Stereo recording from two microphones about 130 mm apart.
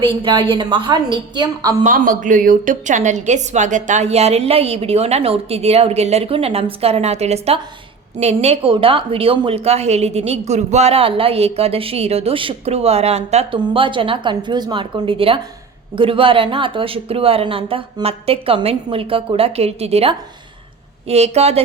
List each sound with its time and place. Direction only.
0.0 s a woman's voice: 45° right (ahead or behind)
1.8 s a woman's voice: 90° right; by 21.6 s 55° right (ahead or behind)